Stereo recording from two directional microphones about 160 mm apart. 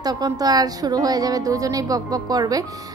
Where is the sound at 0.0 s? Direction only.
25° right (ahead or behind).